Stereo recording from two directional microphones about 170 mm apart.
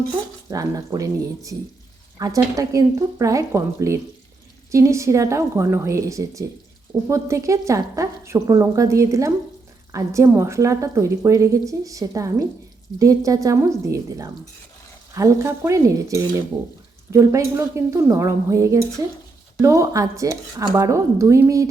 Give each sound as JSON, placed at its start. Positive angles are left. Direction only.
{"t": 0.5, "sound": "speech", "side_deg": -20}